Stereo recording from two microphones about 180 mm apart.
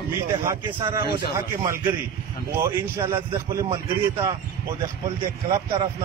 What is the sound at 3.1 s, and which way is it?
Speech, 15° right (ahead or behind).